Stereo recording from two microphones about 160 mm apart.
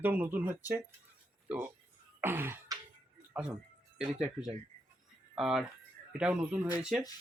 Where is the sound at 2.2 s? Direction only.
15° right (ahead or behind).